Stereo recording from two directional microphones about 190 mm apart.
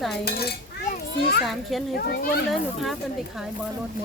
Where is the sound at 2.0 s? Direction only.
50° left (ahead or behind).